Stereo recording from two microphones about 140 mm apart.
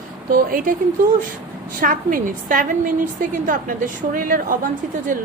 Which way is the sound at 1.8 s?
80° right.